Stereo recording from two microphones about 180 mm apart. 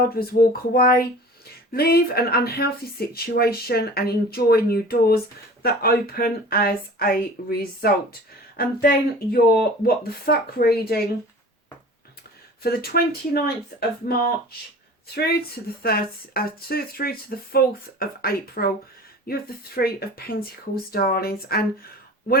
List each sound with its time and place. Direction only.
0.0 s speech: 55° left (ahead or behind)
8.5 s speech: 55° left (ahead or behind)
12.6 s speech: 60° left (ahead or behind)